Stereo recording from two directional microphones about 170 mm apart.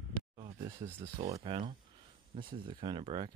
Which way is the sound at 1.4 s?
30° right (ahead or behind).